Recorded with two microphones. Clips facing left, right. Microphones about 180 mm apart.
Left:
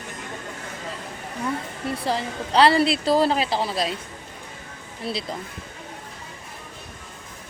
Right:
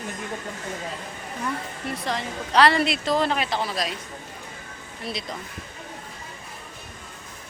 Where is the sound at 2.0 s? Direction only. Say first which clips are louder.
Left 3 dB; 30° left (ahead or behind).